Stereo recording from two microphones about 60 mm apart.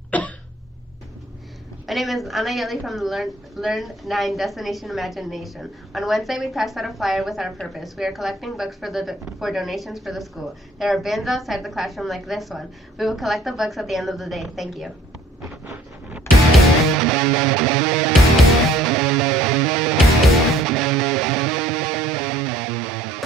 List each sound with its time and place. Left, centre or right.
0.1 s cough: left
1.9 s a woman's voice: centre
16.3 s music: centre